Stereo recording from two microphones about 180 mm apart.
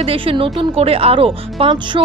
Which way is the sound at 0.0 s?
30° right (ahead or behind).